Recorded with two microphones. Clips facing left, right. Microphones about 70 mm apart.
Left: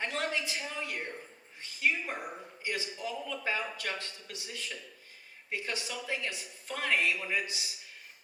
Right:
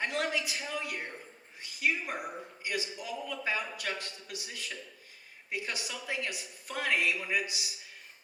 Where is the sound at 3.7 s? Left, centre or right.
Centre.